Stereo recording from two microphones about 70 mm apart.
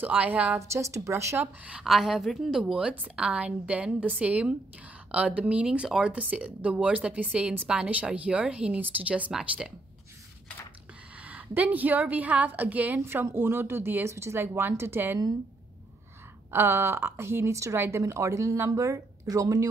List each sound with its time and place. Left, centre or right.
0.0 s a woman's voice: right
0.6 s a woman's voice: right
1.4 s a woman's voice: right
1.8 s a woman's voice: centre; by 9.3 s right
11.1 s a woman's voice: right
13.0 s speech: right
16.4 s a woman's voice: right